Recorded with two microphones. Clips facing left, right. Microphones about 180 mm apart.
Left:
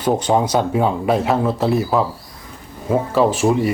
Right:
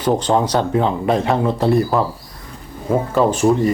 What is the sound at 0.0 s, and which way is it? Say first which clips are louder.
Speech: even; 10° left (ahead or behind).